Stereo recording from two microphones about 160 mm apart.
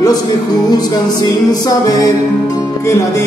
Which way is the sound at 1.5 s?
25° left (ahead or behind).